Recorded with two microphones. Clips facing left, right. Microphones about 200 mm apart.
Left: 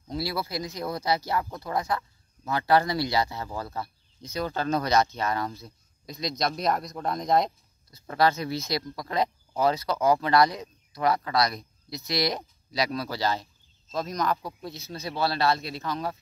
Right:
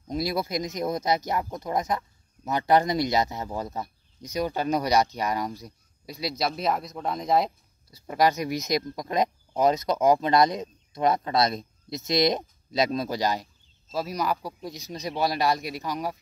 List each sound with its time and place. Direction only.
0.1 s speech: 20° right (ahead or behind)